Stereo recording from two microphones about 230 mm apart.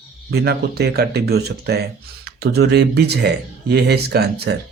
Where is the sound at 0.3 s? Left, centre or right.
Right.